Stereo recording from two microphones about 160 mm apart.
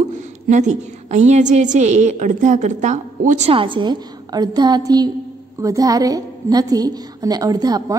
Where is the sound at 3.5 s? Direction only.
30° right (ahead or behind).